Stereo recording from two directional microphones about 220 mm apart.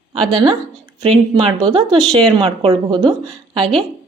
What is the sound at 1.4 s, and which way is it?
Speech, 20° right (ahead or behind).